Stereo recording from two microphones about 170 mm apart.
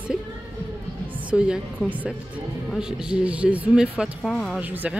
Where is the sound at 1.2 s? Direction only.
5° right (ahead or behind).